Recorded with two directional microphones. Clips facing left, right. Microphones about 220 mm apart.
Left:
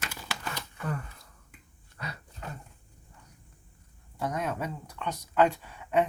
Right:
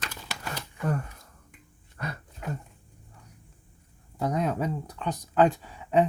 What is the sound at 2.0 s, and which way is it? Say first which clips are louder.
Dog: right 4 dB; 50° right (ahead or behind).